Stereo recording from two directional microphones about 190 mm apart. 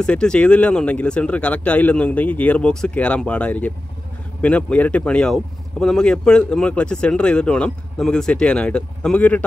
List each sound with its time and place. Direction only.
0.0 s speech: 5° left (ahead or behind)